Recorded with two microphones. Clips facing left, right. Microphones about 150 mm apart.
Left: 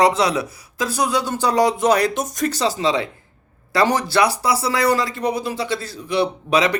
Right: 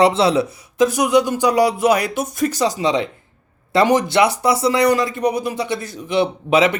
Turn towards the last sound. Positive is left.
turn(degrees=-25)  # may be behind; listen again after turning